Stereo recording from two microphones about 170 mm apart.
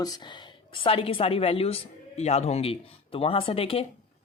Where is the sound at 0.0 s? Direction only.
25° left (ahead or behind).